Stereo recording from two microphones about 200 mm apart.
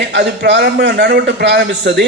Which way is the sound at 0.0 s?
60° right (ahead or behind).